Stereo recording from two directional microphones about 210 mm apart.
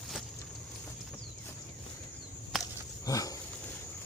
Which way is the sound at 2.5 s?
Centre (ahead or behind).